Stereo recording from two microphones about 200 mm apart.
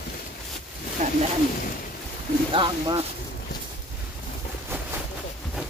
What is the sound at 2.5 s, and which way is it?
Speech, 25° right (ahead or behind).